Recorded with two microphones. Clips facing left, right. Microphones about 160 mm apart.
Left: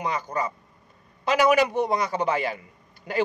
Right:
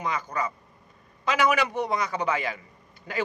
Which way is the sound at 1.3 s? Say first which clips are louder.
Left 4 dB; 40° left (ahead or behind).